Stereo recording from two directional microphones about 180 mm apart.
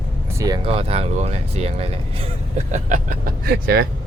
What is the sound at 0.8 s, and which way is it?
Speech, 35° right (ahead or behind).